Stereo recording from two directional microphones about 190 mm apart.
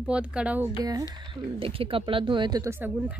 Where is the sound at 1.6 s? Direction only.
30° right (ahead or behind).